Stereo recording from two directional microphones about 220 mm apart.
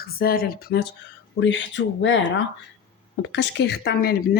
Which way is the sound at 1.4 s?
55° left (ahead or behind).